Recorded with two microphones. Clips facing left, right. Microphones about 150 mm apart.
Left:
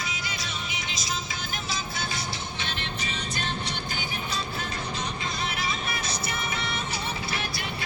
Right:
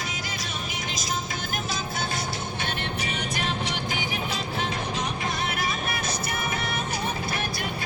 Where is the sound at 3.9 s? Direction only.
90° right.